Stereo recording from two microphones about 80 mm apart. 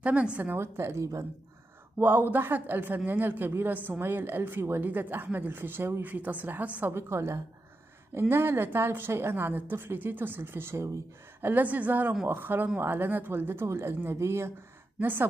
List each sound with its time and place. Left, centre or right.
0.0 s a woman's voice: centre
0.6 s a woman's voice: right
2.0 s speech: right
6.9 s a woman's voice: right
11.4 s speech: right